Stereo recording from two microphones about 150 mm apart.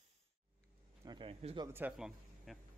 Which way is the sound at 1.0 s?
30° right (ahead or behind).